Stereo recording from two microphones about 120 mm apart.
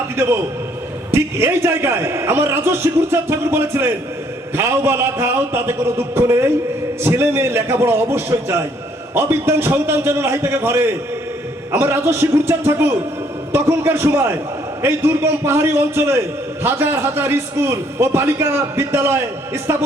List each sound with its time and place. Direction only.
1.1 s a man's voice: 20° right (ahead or behind)